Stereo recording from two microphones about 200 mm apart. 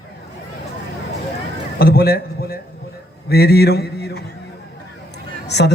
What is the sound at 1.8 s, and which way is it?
Mantra, 50° left (ahead or behind).